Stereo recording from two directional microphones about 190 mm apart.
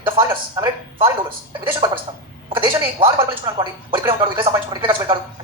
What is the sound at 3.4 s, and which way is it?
Speech, 25° right (ahead or behind).